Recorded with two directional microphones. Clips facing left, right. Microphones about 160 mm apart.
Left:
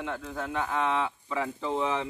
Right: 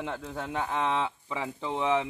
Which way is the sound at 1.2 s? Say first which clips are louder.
Left 3 dB; 15° right (ahead or behind).